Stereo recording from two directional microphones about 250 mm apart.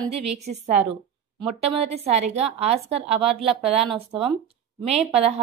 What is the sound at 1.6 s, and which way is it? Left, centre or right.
A woman's voice, right.